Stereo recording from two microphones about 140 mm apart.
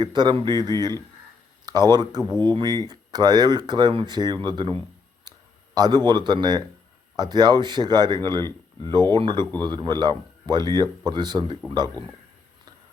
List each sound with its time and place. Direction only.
0.0 s speech: 30° right (ahead or behind)
1.9 s speech: 30° right (ahead or behind)